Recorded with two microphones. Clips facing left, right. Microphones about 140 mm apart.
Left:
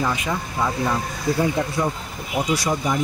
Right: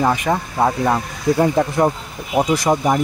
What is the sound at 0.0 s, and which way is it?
Speech, 55° right (ahead or behind).